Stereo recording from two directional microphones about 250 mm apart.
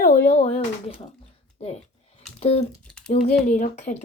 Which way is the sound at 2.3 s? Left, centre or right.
Left.